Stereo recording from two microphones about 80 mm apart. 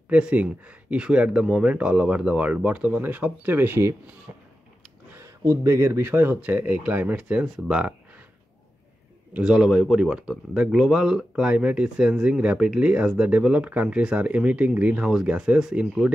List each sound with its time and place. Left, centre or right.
0.1 s speech: centre
4.3 s a sound: right
5.1 s speech: right; by 7.9 s centre
9.3 s speech: centre